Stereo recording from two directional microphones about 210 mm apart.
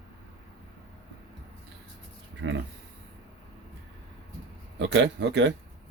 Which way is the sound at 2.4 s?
60° right (ahead or behind).